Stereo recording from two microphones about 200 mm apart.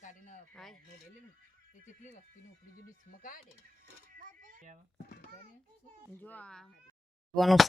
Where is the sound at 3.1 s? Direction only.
45° left (ahead or behind).